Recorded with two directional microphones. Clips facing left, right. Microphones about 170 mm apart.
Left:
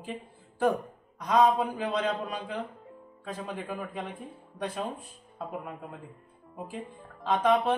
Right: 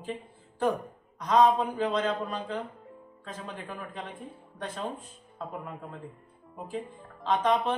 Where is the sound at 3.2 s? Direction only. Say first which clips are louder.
Left 4 dB; 10° left (ahead or behind).